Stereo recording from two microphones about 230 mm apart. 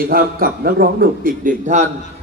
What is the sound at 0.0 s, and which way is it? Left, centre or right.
A man's voice, right.